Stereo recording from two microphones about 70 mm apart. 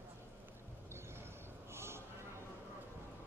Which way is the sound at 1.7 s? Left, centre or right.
Right.